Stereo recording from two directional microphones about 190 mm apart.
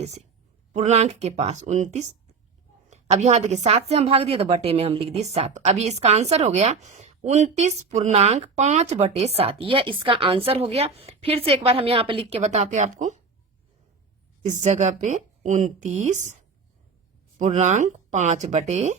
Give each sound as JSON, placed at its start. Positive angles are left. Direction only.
{"t": 0.7, "sound": "a woman's voice", "side_deg": -35}
{"t": 14.4, "sound": "a woman's voice", "side_deg": -40}
{"t": 17.3, "sound": "a woman's voice", "side_deg": -40}